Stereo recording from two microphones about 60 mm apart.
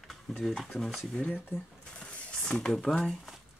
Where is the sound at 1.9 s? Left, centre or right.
Centre.